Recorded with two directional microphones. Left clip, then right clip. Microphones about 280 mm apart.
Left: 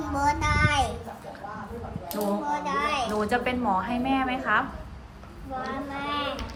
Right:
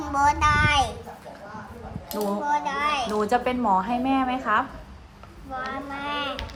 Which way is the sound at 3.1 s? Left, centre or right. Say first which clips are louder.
Right 3 dB; centre.